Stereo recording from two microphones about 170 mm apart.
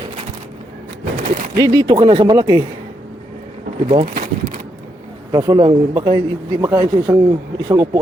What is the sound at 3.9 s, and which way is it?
Speech, 45° right (ahead or behind).